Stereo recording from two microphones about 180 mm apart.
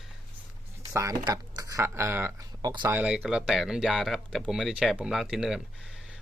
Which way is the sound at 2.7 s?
25° right (ahead or behind).